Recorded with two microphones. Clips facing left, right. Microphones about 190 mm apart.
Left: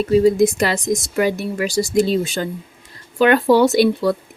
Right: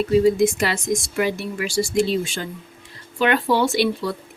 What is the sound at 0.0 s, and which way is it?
Speech, 40° left (ahead or behind).